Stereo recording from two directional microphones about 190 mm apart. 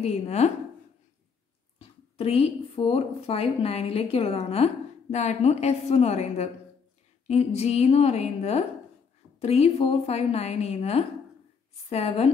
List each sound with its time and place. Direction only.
0.0 s speech: 35° left (ahead or behind)
1.8 s speech: 30° left (ahead or behind)